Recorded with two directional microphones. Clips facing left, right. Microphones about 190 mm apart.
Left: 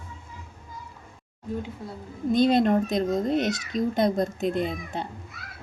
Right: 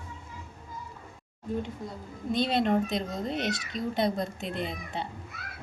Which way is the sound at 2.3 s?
45° left (ahead or behind).